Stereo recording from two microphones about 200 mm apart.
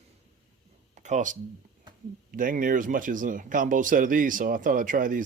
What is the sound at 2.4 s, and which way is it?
Speech, 45° right (ahead or behind).